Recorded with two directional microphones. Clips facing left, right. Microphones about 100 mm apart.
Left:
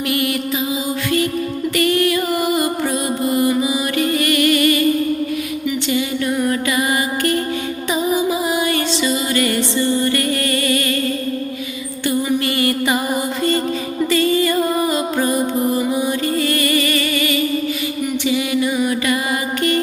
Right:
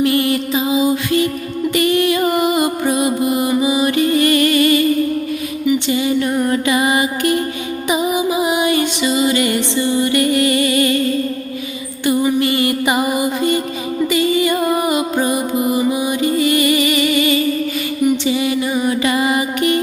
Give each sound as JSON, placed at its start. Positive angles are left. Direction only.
{"t": 0.0, "sound": "mantra", "side_deg": -30}
{"t": 1.7, "sound": "music", "side_deg": -20}
{"t": 5.9, "sound": "mantra", "side_deg": -25}
{"t": 7.9, "sound": "music", "side_deg": -15}
{"t": 12.0, "sound": "music", "side_deg": -20}